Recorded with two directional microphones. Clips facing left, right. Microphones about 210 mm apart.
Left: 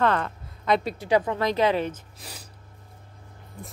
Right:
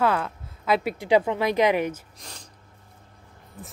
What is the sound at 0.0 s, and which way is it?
A woman's voice, 5° right (ahead or behind).